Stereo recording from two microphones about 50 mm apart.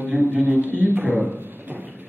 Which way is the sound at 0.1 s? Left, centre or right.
Right.